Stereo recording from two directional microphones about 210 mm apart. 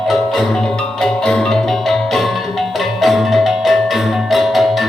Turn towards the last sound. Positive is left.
turn(degrees=0)  # may be behind; listen again after turning